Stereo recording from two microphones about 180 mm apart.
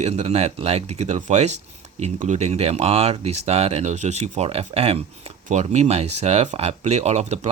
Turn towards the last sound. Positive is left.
turn(degrees=-40)  # may be behind; listen again after turning